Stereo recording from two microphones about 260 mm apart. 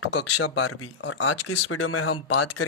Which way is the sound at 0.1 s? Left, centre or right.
Left.